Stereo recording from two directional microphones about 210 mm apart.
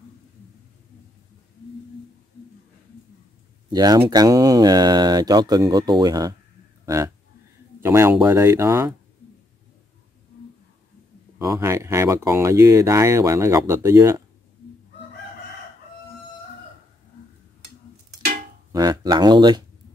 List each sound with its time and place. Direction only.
3.7 s speech: 20° right (ahead or behind)
7.8 s speech: 10° right (ahead or behind)
11.3 s speech: 15° right (ahead or behind)
18.7 s speech: 20° right (ahead or behind)